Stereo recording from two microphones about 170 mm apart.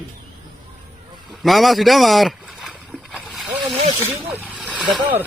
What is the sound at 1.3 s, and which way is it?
Boat, centre (ahead or behind).